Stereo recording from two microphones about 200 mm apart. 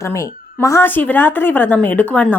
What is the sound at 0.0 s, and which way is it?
A woman's voice, 15° left (ahead or behind).